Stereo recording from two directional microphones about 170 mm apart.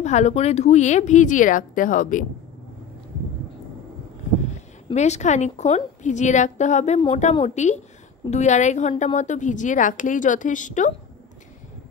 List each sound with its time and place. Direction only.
0.0 s a woman's voice: 40° left (ahead or behind)
4.9 s a woman's voice: 40° left (ahead or behind)